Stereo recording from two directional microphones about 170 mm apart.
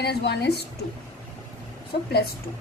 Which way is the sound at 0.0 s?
80° left.